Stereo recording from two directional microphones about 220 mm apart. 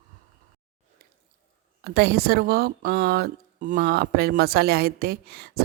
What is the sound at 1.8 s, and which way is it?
Speech, 45° right (ahead or behind).